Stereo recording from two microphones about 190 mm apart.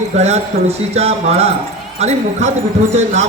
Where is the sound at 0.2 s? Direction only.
35° right (ahead or behind).